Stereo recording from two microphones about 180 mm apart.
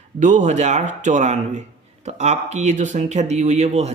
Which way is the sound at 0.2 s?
40° right (ahead or behind).